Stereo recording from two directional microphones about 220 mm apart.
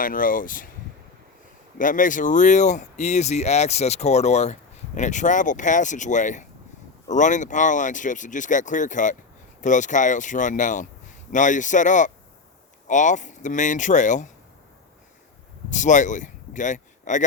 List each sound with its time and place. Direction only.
0.0 s speech: 40° left (ahead or behind)
1.8 s speech: 35° left (ahead or behind)
15.7 s speech: 35° left (ahead or behind)